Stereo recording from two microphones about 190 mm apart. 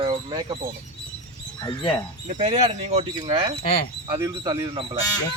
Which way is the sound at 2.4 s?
35° right (ahead or behind).